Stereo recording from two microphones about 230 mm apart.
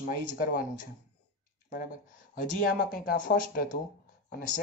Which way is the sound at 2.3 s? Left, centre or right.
Left.